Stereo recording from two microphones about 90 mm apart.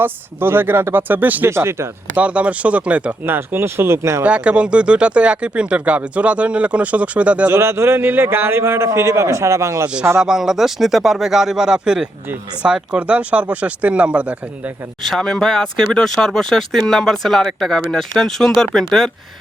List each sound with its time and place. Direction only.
0.0 s a man's voice: 25° right (ahead or behind)
2.1 s speech: 15° right (ahead or behind)
4.2 s speech: 15° right (ahead or behind)
7.5 s a man's voice: 30° right (ahead or behind)
9.8 s speech: 15° right (ahead or behind)
15.0 s speech: 5° left (ahead or behind)